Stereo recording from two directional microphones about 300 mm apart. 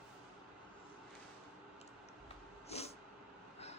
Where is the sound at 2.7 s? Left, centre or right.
Left.